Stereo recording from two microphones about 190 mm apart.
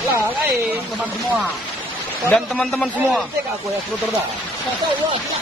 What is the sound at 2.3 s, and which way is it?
Speech, 5° left (ahead or behind).